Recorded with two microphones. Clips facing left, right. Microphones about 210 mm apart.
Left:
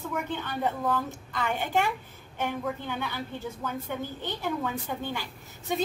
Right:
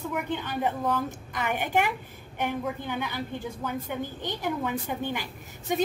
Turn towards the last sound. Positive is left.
turn(degrees=-15)  # may be behind; listen again after turning